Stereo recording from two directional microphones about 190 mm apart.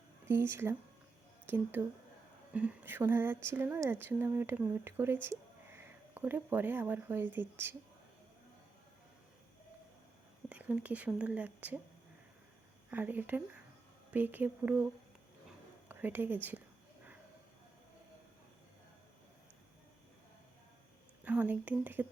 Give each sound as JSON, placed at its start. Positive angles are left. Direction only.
{"t": 0.3, "sound": "speech", "side_deg": -10}
{"t": 10.5, "sound": "speech", "side_deg": -5}
{"t": 12.9, "sound": "speech", "side_deg": -10}
{"t": 15.9, "sound": "speech", "side_deg": -10}
{"t": 21.2, "sound": "speech", "side_deg": -10}